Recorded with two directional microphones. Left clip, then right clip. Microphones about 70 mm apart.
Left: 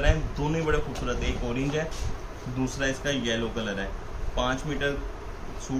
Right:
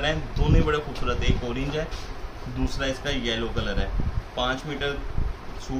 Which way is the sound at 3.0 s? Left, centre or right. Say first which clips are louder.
Even; centre.